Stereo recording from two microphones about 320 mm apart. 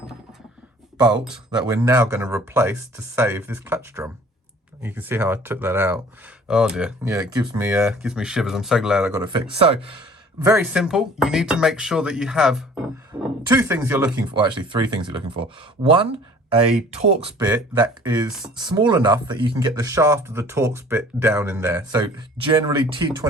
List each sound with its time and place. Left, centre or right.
1.5 s speech: centre
9.2 s speech: centre
10.4 s speech: centre
13.1 s a sound: centre
13.5 s speech: centre